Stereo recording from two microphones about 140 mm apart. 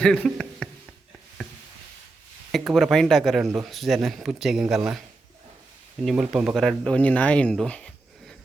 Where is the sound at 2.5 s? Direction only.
Centre (ahead or behind).